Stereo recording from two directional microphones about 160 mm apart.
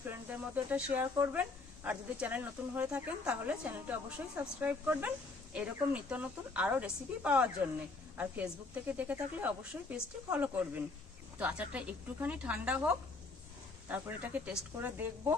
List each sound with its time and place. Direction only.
0.1 s speech: 10° right (ahead or behind)